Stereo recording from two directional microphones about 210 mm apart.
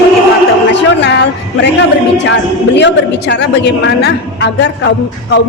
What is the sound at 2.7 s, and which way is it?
A woman's voice, 55° left (ahead or behind).